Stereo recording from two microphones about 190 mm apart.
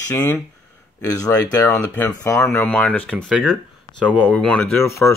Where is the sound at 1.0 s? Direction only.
20° left (ahead or behind).